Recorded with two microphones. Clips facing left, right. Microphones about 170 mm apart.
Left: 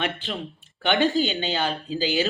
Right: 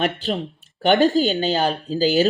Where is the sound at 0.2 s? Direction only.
40° right (ahead or behind).